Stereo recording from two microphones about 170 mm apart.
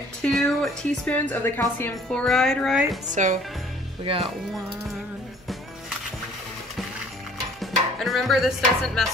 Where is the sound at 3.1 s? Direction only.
45° right (ahead or behind).